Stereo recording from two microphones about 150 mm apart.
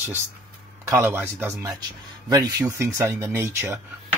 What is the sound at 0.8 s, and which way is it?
A man's voice, 15° right (ahead or behind).